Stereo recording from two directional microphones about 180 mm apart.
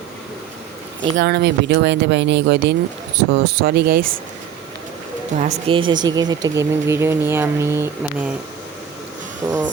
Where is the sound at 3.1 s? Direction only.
60° right (ahead or behind).